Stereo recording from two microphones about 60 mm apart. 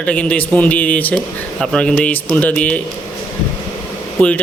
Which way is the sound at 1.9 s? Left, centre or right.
Left.